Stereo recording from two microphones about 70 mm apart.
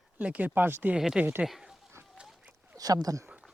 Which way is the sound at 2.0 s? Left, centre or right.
Right.